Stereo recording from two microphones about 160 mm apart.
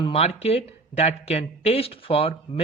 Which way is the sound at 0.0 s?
40° left (ahead or behind).